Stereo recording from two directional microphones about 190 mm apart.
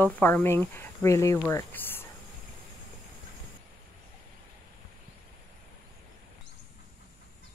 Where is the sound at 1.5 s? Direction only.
10° left (ahead or behind).